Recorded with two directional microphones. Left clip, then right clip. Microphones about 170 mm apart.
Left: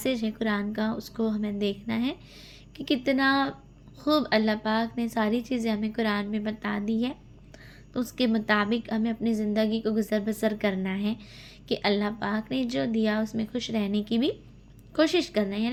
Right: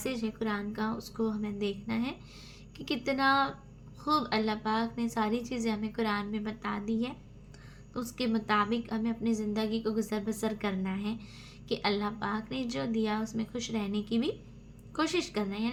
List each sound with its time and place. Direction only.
0.0 s a woman's voice: 35° left (ahead or behind)